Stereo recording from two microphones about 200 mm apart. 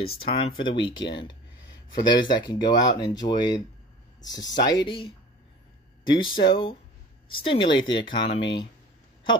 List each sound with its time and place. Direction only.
0.0 s speech: 25° left (ahead or behind)